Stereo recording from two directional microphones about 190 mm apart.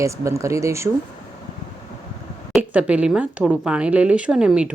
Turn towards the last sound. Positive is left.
turn(degrees=-5)  # may be behind; listen again after turning